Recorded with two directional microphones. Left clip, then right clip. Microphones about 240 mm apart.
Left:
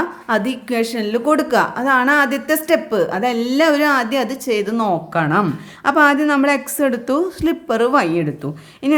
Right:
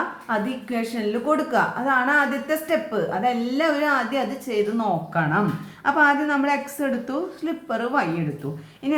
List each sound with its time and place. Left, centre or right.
0.3 s a woman's voice: left